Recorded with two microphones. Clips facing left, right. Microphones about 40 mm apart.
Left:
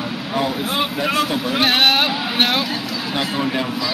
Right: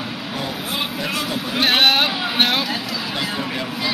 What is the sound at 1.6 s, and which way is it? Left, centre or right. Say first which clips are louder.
A man's voice: even; centre.